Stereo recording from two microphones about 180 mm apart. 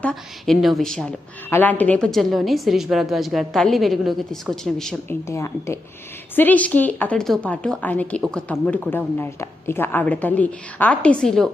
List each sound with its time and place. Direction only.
0.0 s a woman's voice: 5° left (ahead or behind)
5.3 s a woman's voice: 15° left (ahead or behind)